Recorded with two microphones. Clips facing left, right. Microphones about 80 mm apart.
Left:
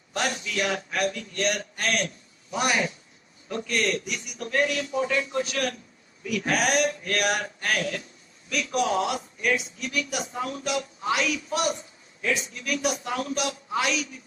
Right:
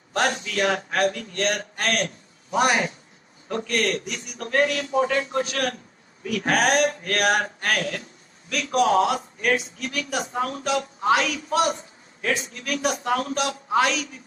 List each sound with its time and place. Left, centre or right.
0.1 s a man's voice: right